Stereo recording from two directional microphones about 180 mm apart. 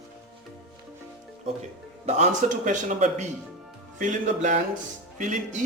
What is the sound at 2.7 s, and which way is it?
Speech, 40° right (ahead or behind).